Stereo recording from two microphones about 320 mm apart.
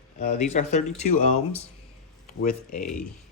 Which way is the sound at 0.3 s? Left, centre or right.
Left.